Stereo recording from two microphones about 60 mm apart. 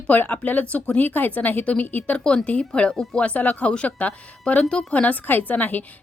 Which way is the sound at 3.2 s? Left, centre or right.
Left.